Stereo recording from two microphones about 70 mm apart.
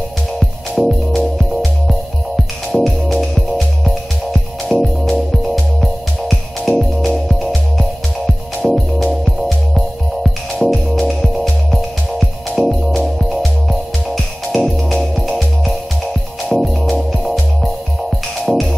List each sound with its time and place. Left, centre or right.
0.7 s music: centre
8.6 s music: centre